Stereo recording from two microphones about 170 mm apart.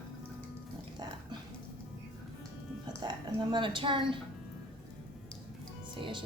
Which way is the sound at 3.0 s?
25° right (ahead or behind).